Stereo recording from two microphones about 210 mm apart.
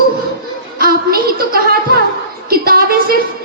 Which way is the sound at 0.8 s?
45° right (ahead or behind).